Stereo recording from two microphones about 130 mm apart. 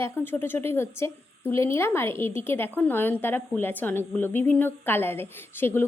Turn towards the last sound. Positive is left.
turn(degrees=15)  # may be behind; listen again after turning